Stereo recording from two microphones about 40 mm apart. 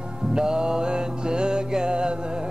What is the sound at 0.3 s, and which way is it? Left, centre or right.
Music, centre.